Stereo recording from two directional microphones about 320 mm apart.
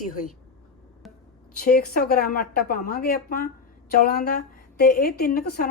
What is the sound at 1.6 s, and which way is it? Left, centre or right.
A woman's voice, left.